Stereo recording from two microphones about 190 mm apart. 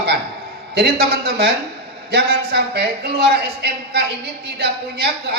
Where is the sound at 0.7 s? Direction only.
60° right (ahead or behind).